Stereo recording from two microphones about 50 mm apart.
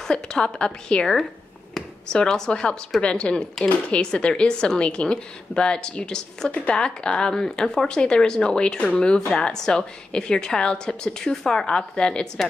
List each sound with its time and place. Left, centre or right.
0.1 s a woman's voice: centre
2.1 s a woman's voice: centre